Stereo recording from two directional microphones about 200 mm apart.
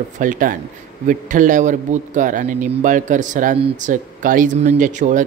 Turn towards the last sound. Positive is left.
turn(degrees=-40)  # may be behind; listen again after turning